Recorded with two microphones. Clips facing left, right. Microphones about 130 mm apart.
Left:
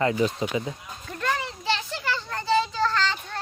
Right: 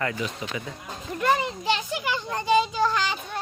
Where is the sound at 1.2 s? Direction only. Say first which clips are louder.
Right 5 dB; 15° right (ahead or behind).